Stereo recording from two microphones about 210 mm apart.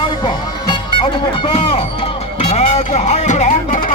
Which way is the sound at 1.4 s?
25° left (ahead or behind).